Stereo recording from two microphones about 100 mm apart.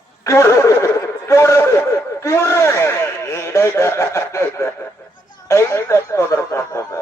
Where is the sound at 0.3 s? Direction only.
30° left (ahead or behind).